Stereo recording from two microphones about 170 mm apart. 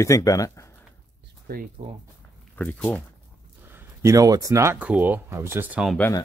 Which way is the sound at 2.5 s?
10° left (ahead or behind).